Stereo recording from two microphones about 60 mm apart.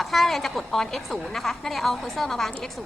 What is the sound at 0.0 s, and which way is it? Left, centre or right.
A woman's voice, centre.